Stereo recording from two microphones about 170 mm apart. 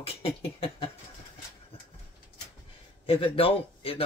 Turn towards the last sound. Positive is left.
turn(degrees=35)  # may be behind; listen again after turning